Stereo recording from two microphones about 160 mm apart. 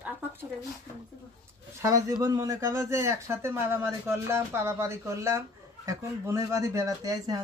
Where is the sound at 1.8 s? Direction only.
20° right (ahead or behind).